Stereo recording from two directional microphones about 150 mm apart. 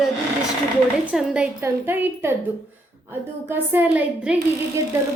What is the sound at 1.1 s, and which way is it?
A woman's voice, 5° right (ahead or behind).